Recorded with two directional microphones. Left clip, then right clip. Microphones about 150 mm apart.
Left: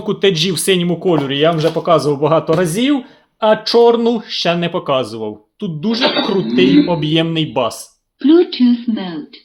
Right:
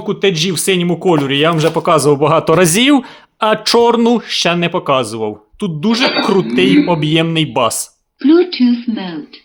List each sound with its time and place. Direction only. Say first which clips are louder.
0.0 s speech: even; 10° right (ahead or behind)
1.0 s speech: right 2 dB; 30° right (ahead or behind); by 3.1 s 75° right (ahead or behind)
3.4 s speech: even; 55° right (ahead or behind)
4.4 s speech: right 1 dB; 30° right (ahead or behind); by 6.0 s 50° right (ahead or behind)
6.0 s speech: even; 5° right (ahead or behind)
6.8 s speech: right 2 dB; 35° right (ahead or behind)
8.2 s speech: even; centre (ahead or behind)